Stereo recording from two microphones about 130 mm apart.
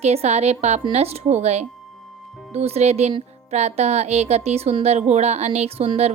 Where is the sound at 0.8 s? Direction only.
45° right (ahead or behind).